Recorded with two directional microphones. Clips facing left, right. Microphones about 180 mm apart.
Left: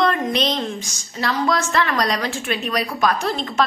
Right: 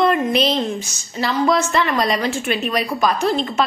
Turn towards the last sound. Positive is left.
turn(degrees=0)  # may be behind; listen again after turning